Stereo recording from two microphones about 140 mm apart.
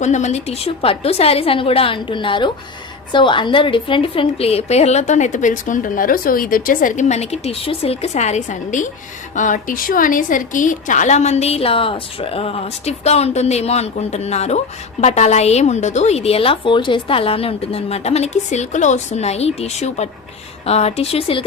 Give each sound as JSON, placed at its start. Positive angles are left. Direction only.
{"t": 0.0, "sound": "a woman's voice", "side_deg": 55}